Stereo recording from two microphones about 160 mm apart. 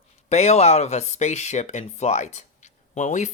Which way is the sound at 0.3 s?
45° left (ahead or behind).